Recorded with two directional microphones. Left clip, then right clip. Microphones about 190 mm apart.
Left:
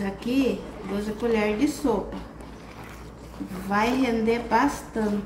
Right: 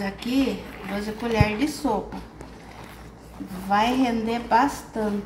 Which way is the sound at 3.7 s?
35° right (ahead or behind).